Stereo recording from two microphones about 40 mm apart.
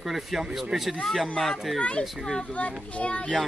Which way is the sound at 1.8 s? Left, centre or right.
Left.